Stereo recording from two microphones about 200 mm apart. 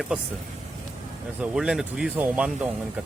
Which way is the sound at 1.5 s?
5° right (ahead or behind).